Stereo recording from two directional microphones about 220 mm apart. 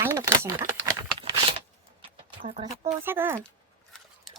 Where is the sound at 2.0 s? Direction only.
25° right (ahead or behind).